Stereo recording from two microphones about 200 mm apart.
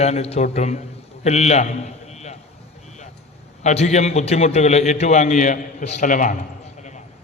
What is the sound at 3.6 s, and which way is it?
A man's voice, 35° left (ahead or behind).